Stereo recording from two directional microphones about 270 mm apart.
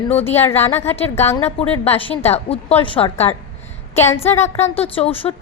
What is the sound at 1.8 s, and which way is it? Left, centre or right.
Speech, left.